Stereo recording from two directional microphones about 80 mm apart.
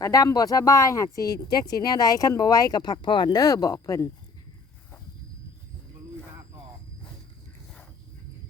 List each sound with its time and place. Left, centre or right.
0.0 s speech: left